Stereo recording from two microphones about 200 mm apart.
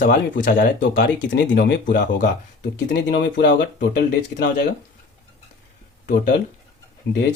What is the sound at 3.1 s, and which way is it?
Speech, 60° left (ahead or behind).